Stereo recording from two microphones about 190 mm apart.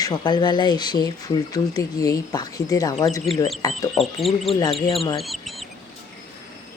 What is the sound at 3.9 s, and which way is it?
Speech, centre (ahead or behind).